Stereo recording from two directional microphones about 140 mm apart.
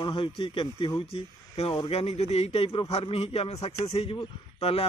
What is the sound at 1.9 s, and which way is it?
A man's voice, 45° left (ahead or behind).